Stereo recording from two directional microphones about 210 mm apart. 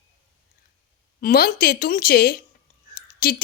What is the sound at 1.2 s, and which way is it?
A woman's voice, 45° left (ahead or behind).